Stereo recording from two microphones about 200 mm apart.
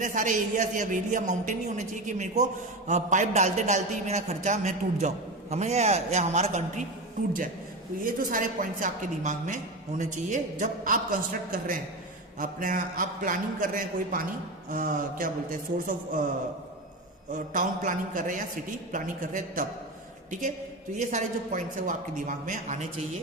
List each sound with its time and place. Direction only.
0.0 s a man's voice: 40° right (ahead or behind)
8.0 s a man's voice: 40° right (ahead or behind)
17.3 s a man's voice: 40° right (ahead or behind)
20.9 s a man's voice: 35° right (ahead or behind)